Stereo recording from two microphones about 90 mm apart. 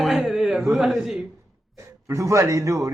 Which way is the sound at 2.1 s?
35° right (ahead or behind).